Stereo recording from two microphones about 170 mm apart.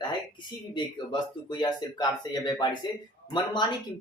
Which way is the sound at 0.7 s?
25° left (ahead or behind).